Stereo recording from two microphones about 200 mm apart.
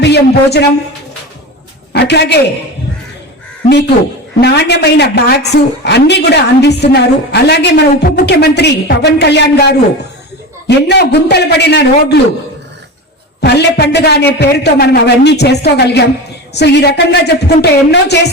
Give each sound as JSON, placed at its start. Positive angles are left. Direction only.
{"t": 0.0, "sound": "speech", "side_deg": 55}
{"t": 1.9, "sound": "a man's voice", "side_deg": 55}
{"t": 4.4, "sound": "a woman's voice", "side_deg": 55}
{"t": 13.4, "sound": "a woman's voice", "side_deg": 55}